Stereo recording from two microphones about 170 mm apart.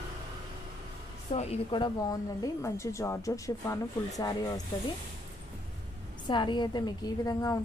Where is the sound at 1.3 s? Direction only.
40° left (ahead or behind).